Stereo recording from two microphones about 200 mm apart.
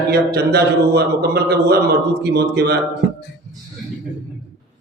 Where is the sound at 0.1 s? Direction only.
55° right (ahead or behind).